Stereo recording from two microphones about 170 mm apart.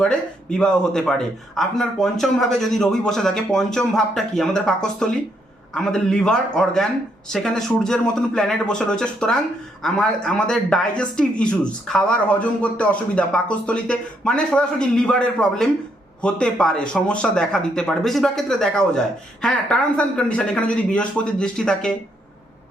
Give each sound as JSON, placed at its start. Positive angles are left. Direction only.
{"t": 0.0, "sound": "speech", "side_deg": 5}